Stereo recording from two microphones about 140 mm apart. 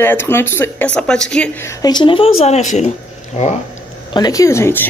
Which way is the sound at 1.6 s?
30° left (ahead or behind).